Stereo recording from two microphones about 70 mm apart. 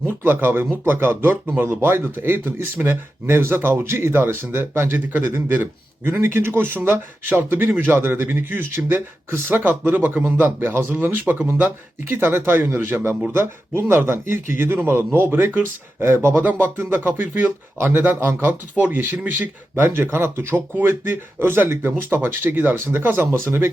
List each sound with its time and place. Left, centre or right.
0.2 s speech: right
16.4 s speech: right